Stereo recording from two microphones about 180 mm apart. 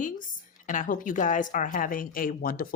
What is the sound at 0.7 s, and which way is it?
A woman's voice, 45° left (ahead or behind).